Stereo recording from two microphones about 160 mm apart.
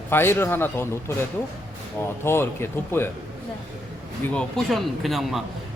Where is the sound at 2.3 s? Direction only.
15° left (ahead or behind).